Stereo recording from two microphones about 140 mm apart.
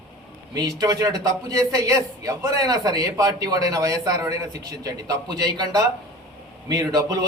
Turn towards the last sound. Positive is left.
turn(degrees=-25)  # may be behind; listen again after turning